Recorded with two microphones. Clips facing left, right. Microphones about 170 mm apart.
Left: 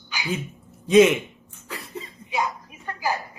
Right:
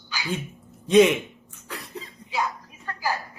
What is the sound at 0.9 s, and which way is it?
Speech, centre (ahead or behind).